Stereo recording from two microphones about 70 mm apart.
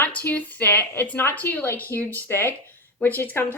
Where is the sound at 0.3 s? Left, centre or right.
Left.